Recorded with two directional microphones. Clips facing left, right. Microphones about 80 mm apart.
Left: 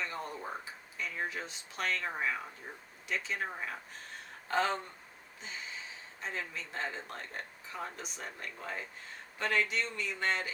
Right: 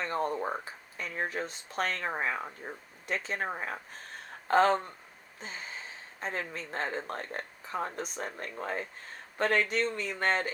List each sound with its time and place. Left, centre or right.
0.0 s speech: right